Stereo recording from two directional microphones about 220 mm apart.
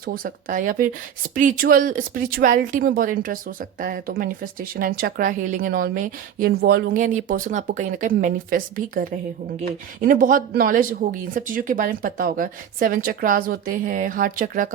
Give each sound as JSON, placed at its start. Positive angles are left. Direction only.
{"t": 0.0, "sound": "speech", "side_deg": -40}